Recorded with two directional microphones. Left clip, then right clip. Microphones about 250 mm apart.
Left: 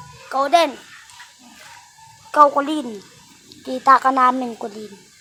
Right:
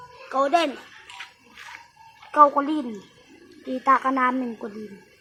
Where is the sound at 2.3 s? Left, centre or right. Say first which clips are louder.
Left 3 dB; centre.